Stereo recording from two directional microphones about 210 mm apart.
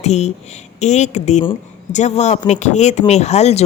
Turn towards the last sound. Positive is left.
turn(degrees=30)  # may be behind; listen again after turning